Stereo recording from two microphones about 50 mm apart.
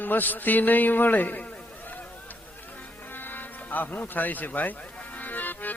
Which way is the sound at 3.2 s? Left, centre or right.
Left.